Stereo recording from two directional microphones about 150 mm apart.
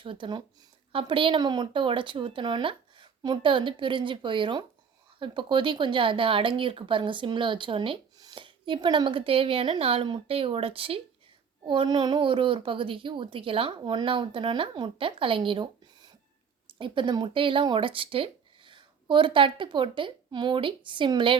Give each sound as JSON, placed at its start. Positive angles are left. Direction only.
{"t": 0.0, "sound": "speech", "side_deg": -35}